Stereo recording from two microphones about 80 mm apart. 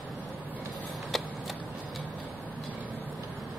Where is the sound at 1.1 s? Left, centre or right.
Centre.